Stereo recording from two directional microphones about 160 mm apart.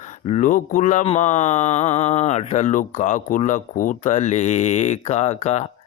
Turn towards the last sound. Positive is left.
turn(degrees=45)  # may be behind; listen again after turning